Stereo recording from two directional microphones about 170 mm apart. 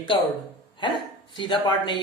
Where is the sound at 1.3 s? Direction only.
30° left (ahead or behind).